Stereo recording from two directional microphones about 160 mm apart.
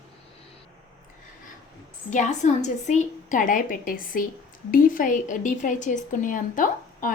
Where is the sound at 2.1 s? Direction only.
50° left (ahead or behind).